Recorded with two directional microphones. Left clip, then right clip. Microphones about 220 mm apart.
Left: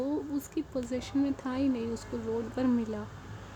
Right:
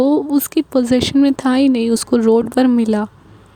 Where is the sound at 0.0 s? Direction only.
45° right (ahead or behind).